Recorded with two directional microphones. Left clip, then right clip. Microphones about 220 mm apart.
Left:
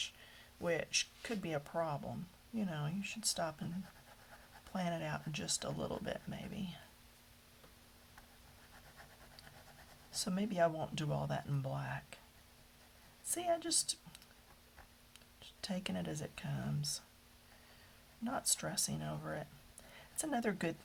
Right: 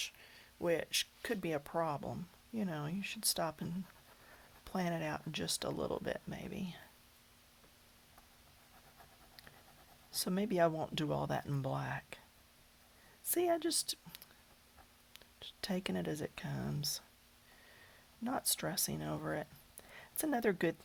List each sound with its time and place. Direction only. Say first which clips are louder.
0.6 s speech: right 2 dB; 35° right (ahead or behind)
4.7 s speech: right 2 dB; 40° right (ahead or behind)
10.2 s speech: right 2 dB; 35° right (ahead or behind)
13.3 s speech: right 2 dB; 35° right (ahead or behind)
15.6 s speech: right 3 dB; 35° right (ahead or behind)
18.2 s a woman's voice: right 1 dB; 35° right (ahead or behind)